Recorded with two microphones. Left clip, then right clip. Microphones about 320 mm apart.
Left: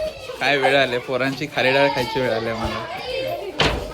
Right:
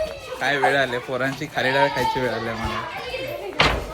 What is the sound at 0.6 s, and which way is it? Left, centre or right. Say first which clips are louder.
Speech: left 2 dB; centre.